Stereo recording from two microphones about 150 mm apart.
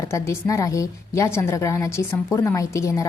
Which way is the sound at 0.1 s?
20° left (ahead or behind).